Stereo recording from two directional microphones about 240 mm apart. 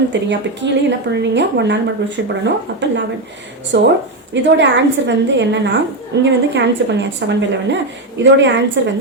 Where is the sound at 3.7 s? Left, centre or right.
Right.